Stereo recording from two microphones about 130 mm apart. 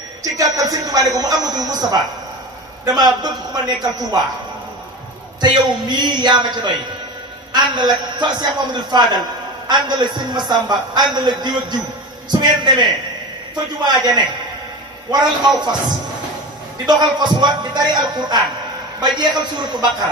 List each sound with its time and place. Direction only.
0.2 s music: 25° right (ahead or behind)
1.1 s speech: 30° right (ahead or behind)
3.0 s a man's voice: 30° right (ahead or behind)
5.4 s a man's voice: 35° right (ahead or behind)
16.8 s a man's voice: 35° right (ahead or behind)